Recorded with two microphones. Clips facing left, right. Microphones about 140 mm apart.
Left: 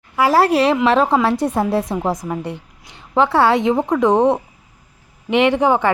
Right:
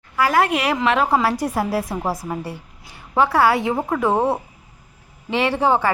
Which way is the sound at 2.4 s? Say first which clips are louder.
Left 4 dB; 20° left (ahead or behind).